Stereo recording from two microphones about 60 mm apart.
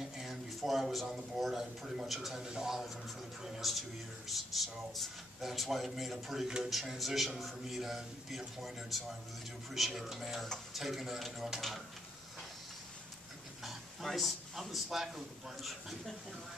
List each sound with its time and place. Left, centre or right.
0.0 s a man's voice: centre
13.7 s a man's voice: centre